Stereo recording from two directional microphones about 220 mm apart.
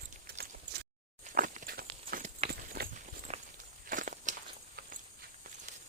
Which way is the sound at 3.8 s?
35° right (ahead or behind).